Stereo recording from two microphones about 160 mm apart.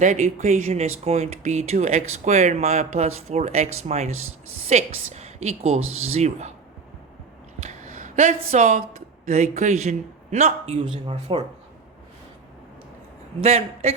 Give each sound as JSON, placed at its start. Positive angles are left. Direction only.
{"t": 0.0, "sound": "speech", "side_deg": -50}
{"t": 7.6, "sound": "a sound", "side_deg": -50}
{"t": 9.2, "sound": "speech", "side_deg": -45}
{"t": 13.4, "sound": "speech", "side_deg": -40}